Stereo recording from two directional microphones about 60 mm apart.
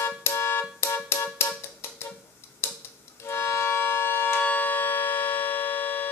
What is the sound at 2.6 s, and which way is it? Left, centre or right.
Tick-tock, left.